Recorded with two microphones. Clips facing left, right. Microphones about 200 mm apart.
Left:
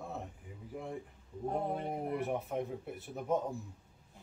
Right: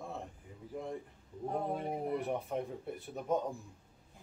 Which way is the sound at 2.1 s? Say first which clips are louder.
Left 2 dB; 5° left (ahead or behind).